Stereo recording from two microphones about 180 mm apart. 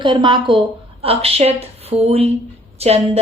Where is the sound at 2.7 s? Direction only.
35° right (ahead or behind).